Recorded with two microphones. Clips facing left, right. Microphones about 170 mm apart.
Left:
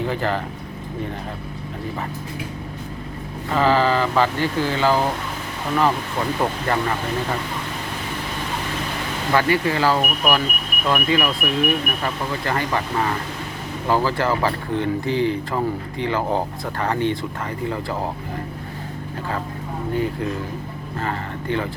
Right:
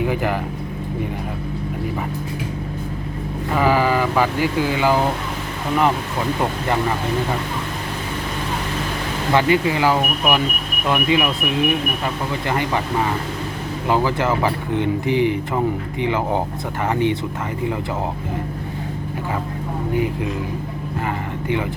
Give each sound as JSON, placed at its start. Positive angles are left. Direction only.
{"t": 0.0, "sound": "speech", "side_deg": -15}
{"t": 3.5, "sound": "speech", "side_deg": -15}
{"t": 9.3, "sound": "speech", "side_deg": -20}
{"t": 13.8, "sound": "speech", "side_deg": -15}
{"t": 21.0, "sound": "speech", "side_deg": -15}